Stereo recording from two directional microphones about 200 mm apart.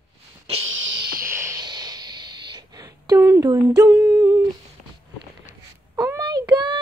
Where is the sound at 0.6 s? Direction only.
75° right (ahead or behind).